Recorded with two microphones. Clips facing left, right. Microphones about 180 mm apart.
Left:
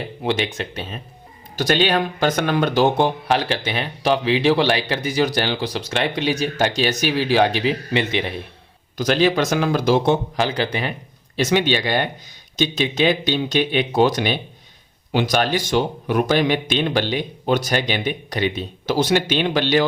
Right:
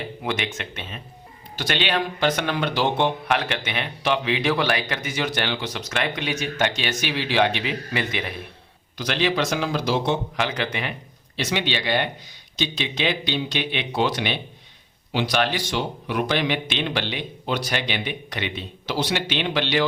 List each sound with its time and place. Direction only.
0.2 s a man's voice: 30° left (ahead or behind)
9.0 s a man's voice: 45° left (ahead or behind)
10.3 s speech: 35° left (ahead or behind)
11.3 s a man's voice: 45° left (ahead or behind)